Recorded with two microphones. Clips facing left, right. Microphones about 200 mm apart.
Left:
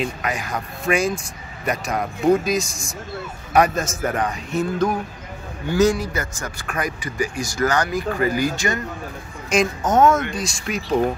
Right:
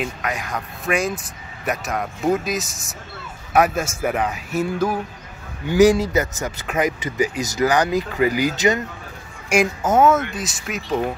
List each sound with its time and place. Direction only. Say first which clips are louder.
0.0 s a man's voice: left 1 dB; centre (ahead or behind); by 8.8 s 20° right (ahead or behind)
9.5 s a man's voice: right 1 dB; 10° right (ahead or behind)